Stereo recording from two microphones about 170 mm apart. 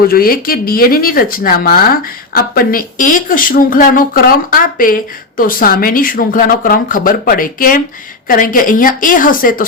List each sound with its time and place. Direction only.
0.1 s a woman's voice: 60° left (ahead or behind)